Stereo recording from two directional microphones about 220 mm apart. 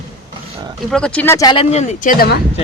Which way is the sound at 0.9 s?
5° left (ahead or behind).